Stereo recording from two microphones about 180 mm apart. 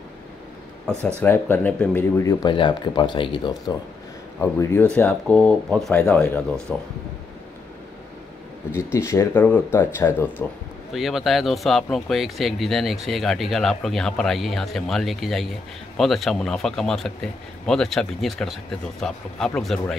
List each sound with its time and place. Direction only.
1.2 s speech: 10° left (ahead or behind); by 3.7 s 25° left (ahead or behind)
4.4 s speech: 10° left (ahead or behind)
8.7 s speech: 15° left (ahead or behind)
10.9 s speech: centre (ahead or behind)